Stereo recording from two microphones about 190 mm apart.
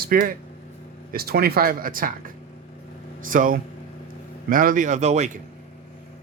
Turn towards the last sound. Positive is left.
turn(degrees=-35)  # may be behind; listen again after turning